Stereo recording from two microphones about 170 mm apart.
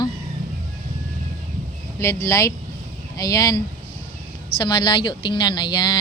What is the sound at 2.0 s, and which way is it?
Speech, 15° left (ahead or behind).